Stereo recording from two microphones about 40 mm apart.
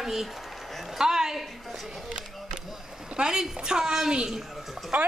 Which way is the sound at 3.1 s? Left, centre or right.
Centre.